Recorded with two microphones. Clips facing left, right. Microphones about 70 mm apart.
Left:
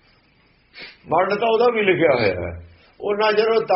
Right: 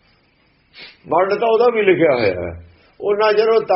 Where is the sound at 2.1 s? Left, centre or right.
Right.